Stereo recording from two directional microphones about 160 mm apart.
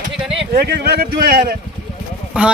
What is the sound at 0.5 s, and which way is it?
Speech, 80° right.